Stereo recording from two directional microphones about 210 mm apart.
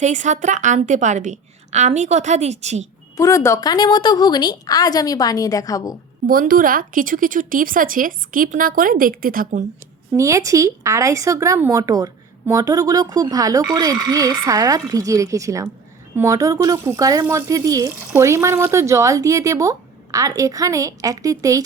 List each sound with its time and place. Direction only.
0.0 s a woman's voice: 35° right (ahead or behind)
3.2 s a woman's voice: 15° left (ahead or behind)
6.2 s a woman's voice: 40° right (ahead or behind)
10.1 s speech: 15° right (ahead or behind)